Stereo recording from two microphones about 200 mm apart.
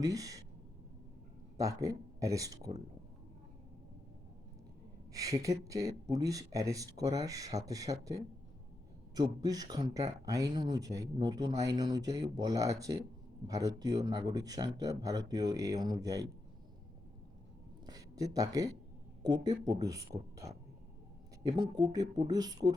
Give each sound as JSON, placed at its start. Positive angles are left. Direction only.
{"t": 0.0, "sound": "speech", "side_deg": -15}
{"t": 1.5, "sound": "speech", "side_deg": -15}
{"t": 5.1, "sound": "speech", "side_deg": -15}
{"t": 17.8, "sound": "a sound", "side_deg": -20}
{"t": 19.2, "sound": "speech", "side_deg": -20}
{"t": 21.4, "sound": "speech", "side_deg": -20}